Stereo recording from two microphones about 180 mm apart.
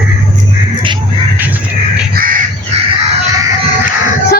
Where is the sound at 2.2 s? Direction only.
50° right (ahead or behind).